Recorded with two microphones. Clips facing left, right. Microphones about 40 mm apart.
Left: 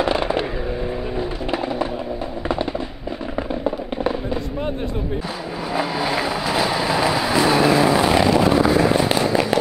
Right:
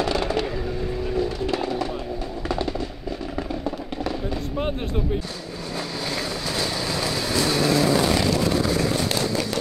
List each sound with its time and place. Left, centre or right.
0.0 s vehicle: left
3.6 s fireworks: left
5.7 s vehicle: left